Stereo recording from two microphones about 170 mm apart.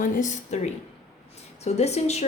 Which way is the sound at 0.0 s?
45° left (ahead or behind).